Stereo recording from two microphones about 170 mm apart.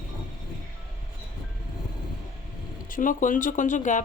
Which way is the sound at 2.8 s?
50° left (ahead or behind).